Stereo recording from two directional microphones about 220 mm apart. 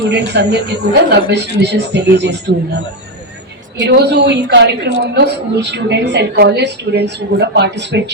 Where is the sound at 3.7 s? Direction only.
55° right (ahead or behind).